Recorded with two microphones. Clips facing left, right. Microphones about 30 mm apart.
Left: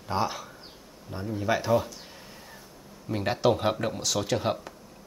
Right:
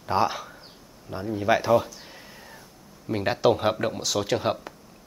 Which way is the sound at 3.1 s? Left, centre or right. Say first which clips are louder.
Right 3 dB; centre.